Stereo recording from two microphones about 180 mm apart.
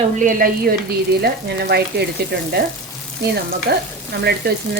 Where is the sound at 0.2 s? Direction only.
50° right (ahead or behind).